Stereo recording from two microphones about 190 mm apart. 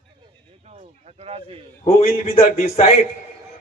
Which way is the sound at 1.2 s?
30° right (ahead or behind).